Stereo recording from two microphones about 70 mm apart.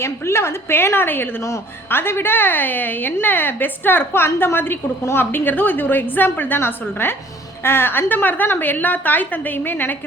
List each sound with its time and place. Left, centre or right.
0.0 s a woman's voice: left